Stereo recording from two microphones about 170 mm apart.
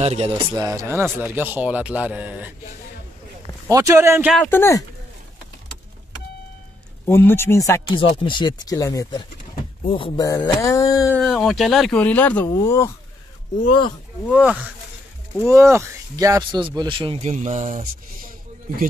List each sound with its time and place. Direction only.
0.0 s speech: 40° right (ahead or behind)
0.3 s a man's voice: 20° right (ahead or behind)
3.7 s a man's voice: 15° right (ahead or behind)
4.3 s speech: 10° left (ahead or behind)
7.1 s speech: 15° left (ahead or behind)
7.9 s speech: 30° left (ahead or behind)
9.8 s speech: 30° left (ahead or behind)
11.1 s speech: centre (ahead or behind); by 12.9 s 15° left (ahead or behind)
14.3 s a man's voice: 5° right (ahead or behind)
15.4 s a man's voice: 15° right (ahead or behind)
17.2 s speech: 45° right (ahead or behind)